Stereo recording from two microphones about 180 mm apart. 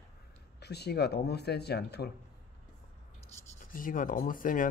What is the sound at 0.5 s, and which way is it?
Speech, 65° left (ahead or behind).